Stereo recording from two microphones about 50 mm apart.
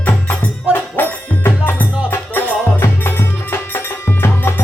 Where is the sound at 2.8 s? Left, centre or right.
Left.